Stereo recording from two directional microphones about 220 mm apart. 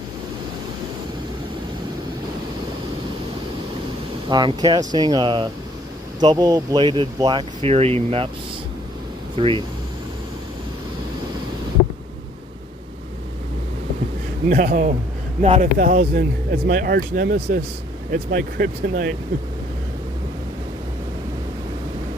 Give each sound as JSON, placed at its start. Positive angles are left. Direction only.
{"t": 4.3, "sound": "speech", "side_deg": -20}
{"t": 9.4, "sound": "speech", "side_deg": -25}
{"t": 14.5, "sound": "speech", "side_deg": -40}
{"t": 15.8, "sound": "speech", "side_deg": -40}